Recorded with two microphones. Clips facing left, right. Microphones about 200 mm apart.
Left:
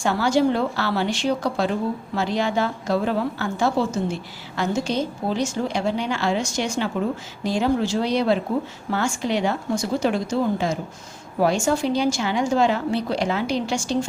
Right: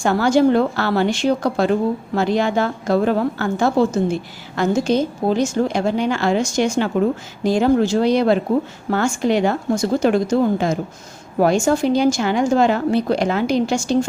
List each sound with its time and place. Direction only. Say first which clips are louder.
0.0 s a woman's voice: right 5 dB; 50° right (ahead or behind)